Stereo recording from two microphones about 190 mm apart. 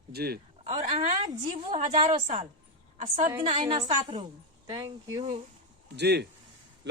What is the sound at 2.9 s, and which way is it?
Speech, 40° right (ahead or behind).